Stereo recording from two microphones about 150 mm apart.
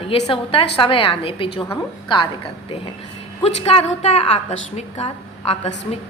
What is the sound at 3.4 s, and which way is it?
A man's voice, 40° left (ahead or behind).